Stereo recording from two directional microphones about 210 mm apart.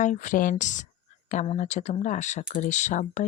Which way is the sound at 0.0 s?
35° left (ahead or behind).